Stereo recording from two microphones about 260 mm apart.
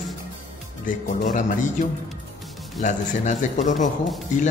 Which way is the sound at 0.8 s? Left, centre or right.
Left.